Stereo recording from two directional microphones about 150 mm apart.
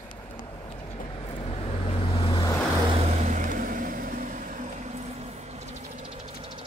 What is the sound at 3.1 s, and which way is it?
Vehicle, 50° right (ahead or behind).